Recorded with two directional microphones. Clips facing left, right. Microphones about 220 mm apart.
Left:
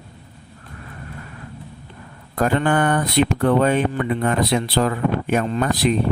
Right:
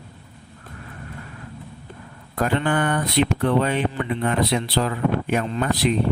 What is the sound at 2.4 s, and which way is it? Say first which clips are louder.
Speech: left 3 dB; 45° left (ahead or behind).